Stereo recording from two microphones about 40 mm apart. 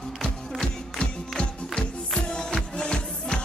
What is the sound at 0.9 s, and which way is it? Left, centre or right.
Music, left.